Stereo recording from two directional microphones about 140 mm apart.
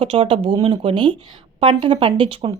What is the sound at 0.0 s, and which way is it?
Speech, 40° right (ahead or behind).